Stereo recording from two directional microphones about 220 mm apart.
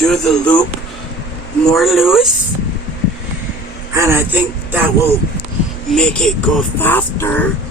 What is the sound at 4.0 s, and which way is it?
Speech, 10° right (ahead or behind).